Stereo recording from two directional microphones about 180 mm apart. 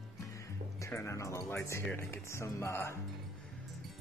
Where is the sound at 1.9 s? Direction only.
15° left (ahead or behind).